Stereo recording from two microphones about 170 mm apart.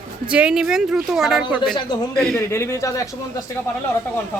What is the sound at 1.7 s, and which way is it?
Speech, 25° left (ahead or behind).